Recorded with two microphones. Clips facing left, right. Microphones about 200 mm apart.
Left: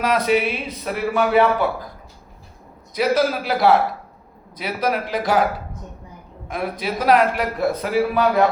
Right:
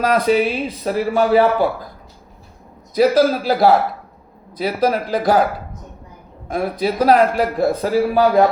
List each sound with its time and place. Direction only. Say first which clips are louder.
0.0 s a man's voice: right 3 dB; 35° right (ahead or behind)
2.9 s a man's voice: right 5 dB; 35° right (ahead or behind)
6.5 s a man's voice: right 5 dB; 35° right (ahead or behind)